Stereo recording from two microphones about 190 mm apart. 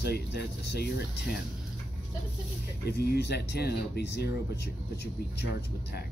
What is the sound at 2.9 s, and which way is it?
Speech, 60° left (ahead or behind).